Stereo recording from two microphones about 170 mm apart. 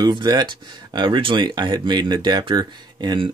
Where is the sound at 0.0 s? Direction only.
25° right (ahead or behind).